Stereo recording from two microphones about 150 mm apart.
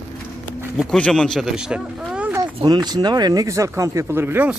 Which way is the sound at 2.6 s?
25° right (ahead or behind).